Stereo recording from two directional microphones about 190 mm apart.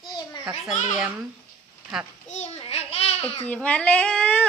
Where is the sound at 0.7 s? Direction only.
5° right (ahead or behind).